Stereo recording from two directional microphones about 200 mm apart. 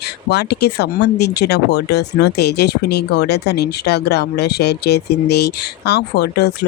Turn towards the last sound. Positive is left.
turn(degrees=55)  # may be behind; listen again after turning